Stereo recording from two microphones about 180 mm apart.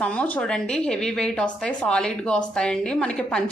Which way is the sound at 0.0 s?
5° left (ahead or behind).